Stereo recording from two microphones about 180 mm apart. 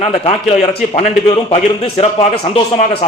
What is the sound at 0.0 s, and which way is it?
A man's voice, 35° left (ahead or behind).